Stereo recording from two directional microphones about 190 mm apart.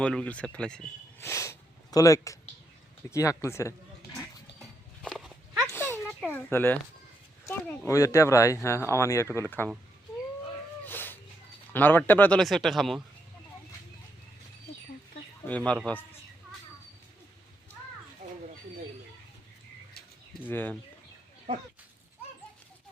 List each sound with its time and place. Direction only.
0.0 s speech: 5° left (ahead or behind)
1.2 s speech: 15° left (ahead or behind)
4.6 s dog: centre (ahead or behind)
5.7 s a sound: 10° left (ahead or behind)
6.3 s speech: 10° left (ahead or behind)
10.8 s a sound: 10° left (ahead or behind)
11.7 s speech: 10° left (ahead or behind)
15.4 s speech: 5° left (ahead or behind)
18.2 s children playing: 45° right (ahead or behind)
20.5 s speech: 10° left (ahead or behind)